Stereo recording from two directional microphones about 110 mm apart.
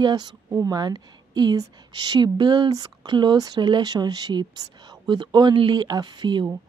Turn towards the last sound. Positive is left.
turn(degrees=-45)  # may be behind; listen again after turning